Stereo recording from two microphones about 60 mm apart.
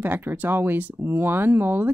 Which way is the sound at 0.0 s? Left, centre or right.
Right.